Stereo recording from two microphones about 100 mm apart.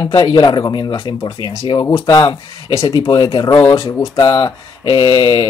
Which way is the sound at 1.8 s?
30° left (ahead or behind).